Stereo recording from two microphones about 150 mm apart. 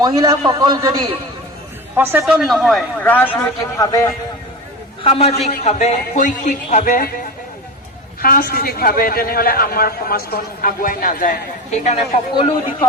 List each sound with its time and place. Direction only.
0.0 s a man's voice: 25° right (ahead or behind)
2.0 s a man's voice: 10° right (ahead or behind); by 3.5 s 10° left (ahead or behind)
3.8 s a man's voice: 20° left (ahead or behind)
5.0 s a man's voice: 40° left (ahead or behind); by 7.1 s 65° left (ahead or behind)
8.2 s a man's voice: 80° left; by 11.9 s 55° left (ahead or behind)
12.3 s a man's voice: 35° left (ahead or behind)